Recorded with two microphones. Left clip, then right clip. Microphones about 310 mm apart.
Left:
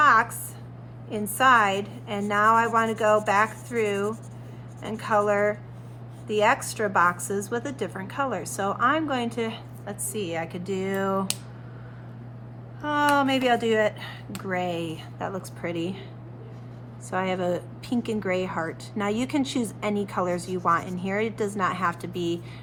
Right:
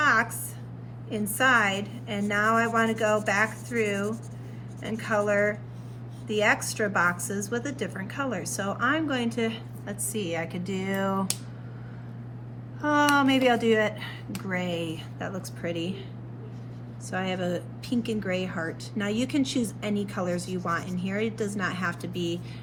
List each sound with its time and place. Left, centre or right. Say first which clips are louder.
0.0 s a sound: left 4 dB; centre
1.4 s speech: left 3 dB; centre
12.8 s speech: even; centre
17.2 s speech: left 4 dB; centre